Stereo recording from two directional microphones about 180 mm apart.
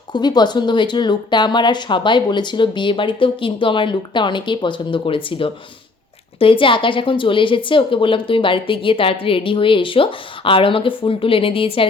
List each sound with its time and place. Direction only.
0.1 s a woman's voice: 25° left (ahead or behind)